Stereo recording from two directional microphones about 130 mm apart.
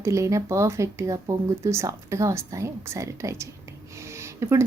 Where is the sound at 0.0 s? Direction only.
25° right (ahead or behind).